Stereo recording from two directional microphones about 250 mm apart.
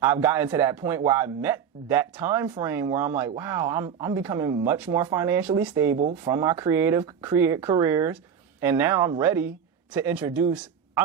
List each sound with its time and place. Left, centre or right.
0.0 s a man's voice: centre